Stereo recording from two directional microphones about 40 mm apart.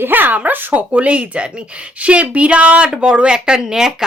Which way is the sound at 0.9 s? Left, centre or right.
Right.